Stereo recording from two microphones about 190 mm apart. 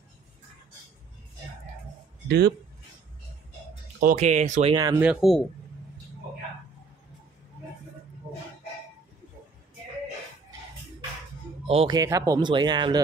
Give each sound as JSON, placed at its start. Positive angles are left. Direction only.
{"t": 2.2, "sound": "speech", "side_deg": -60}
{"t": 4.0, "sound": "speech", "side_deg": -40}
{"t": 5.0, "sound": "speech", "side_deg": 0}
{"t": 11.6, "sound": "speech", "side_deg": -30}
{"t": 12.0, "sound": "speech", "side_deg": -20}